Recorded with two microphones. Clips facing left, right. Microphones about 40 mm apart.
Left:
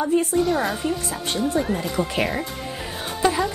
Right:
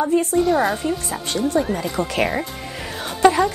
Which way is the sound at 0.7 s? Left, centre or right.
Centre.